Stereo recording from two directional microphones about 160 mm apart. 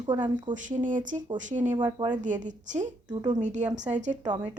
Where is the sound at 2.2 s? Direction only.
50° right (ahead or behind).